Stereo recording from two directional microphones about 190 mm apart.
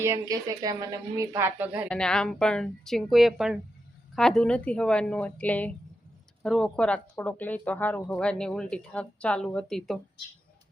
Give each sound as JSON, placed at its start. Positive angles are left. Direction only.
{"t": 0.0, "sound": "speech", "side_deg": -15}
{"t": 1.9, "sound": "speech", "side_deg": 5}